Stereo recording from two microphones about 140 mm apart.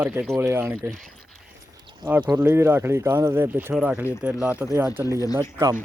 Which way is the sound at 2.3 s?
15° right (ahead or behind).